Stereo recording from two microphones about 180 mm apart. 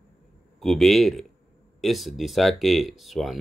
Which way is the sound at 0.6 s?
Centre (ahead or behind).